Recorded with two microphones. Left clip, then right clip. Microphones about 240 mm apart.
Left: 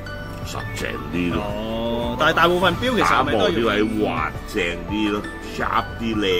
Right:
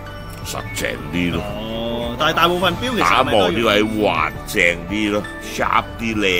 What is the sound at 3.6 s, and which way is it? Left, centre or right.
Speech, right.